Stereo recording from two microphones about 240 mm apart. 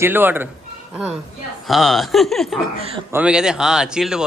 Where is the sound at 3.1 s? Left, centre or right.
Centre.